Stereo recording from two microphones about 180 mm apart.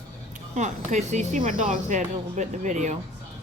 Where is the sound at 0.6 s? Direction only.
40° right (ahead or behind).